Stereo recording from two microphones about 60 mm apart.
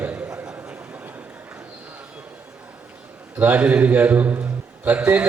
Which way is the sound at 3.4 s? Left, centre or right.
Right.